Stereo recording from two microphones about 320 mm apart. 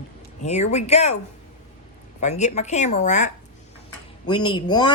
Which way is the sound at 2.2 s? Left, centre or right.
Left.